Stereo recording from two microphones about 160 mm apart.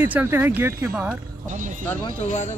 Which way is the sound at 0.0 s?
10° right (ahead or behind).